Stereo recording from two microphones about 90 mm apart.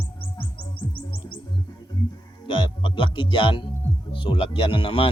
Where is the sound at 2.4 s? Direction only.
65° left (ahead or behind).